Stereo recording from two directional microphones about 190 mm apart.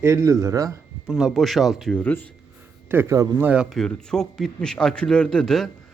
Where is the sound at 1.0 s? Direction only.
Centre (ahead or behind).